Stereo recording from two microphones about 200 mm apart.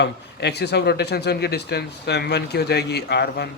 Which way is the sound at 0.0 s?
55° left (ahead or behind).